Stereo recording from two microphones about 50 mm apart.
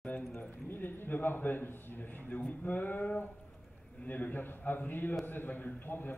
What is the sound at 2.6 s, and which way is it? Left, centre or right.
Speech, left.